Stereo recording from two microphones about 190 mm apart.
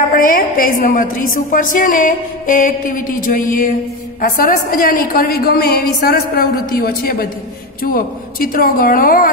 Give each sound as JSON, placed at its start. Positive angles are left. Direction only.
{"t": 0.1, "sound": "a woman's voice", "side_deg": 50}